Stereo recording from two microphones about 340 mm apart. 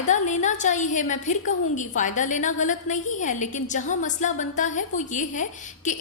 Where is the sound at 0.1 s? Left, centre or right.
Left.